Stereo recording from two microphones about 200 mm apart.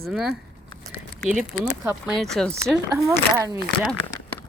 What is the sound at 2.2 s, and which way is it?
Speech, 5° left (ahead or behind).